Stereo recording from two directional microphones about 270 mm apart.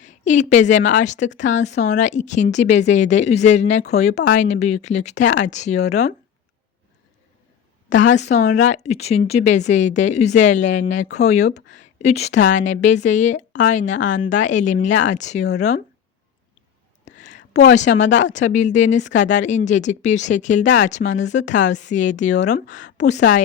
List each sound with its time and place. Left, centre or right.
0.0 s a woman's voice: left
7.9 s speech: left
17.1 s a sound: left
17.5 s a woman's voice: left
21.1 s speech: left
21.3 s speech: left